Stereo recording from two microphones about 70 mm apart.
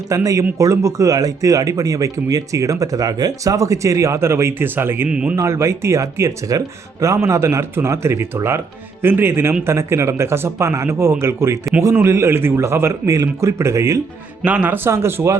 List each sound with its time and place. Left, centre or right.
0.1 s speech: right
5.0 s speech: centre
5.4 s speech: right
13.1 s speech: right
14.4 s a man's voice: right
14.8 s speech: right